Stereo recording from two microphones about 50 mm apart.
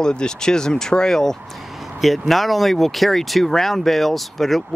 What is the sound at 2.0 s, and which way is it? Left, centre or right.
Speech, centre.